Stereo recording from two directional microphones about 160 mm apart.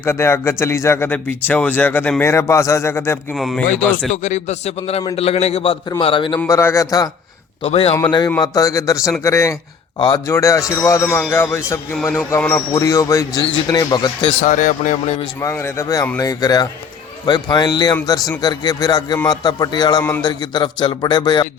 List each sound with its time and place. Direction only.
0.0 s a man's voice: 15° left (ahead or behind)
3.3 s speech: centre (ahead or behind)
4.1 s a man's voice: 50° left (ahead or behind); by 6.4 s 30° left (ahead or behind)
6.5 s a man's voice: 15° left (ahead or behind)
7.6 s a man's voice: 40° left (ahead or behind)
8.0 s a man's voice: 25° left (ahead or behind)
14.4 s speech: 50° left (ahead or behind)
15.4 s a man's voice: 15° left (ahead or behind)